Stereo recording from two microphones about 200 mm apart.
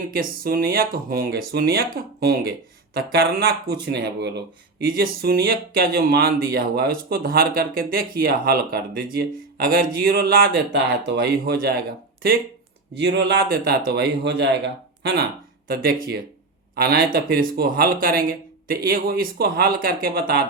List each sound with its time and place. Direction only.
0.1 s speech: 50° right (ahead or behind)
10.7 s speech: 65° right (ahead or behind)